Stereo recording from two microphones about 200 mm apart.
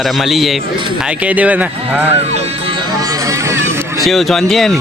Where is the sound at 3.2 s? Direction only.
15° right (ahead or behind).